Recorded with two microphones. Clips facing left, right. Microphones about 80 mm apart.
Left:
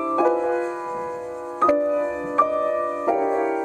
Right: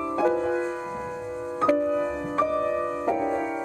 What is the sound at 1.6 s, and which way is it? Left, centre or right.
Music, centre.